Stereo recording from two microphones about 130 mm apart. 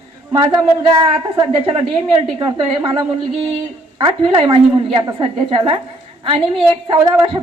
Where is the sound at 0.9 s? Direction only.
40° right (ahead or behind).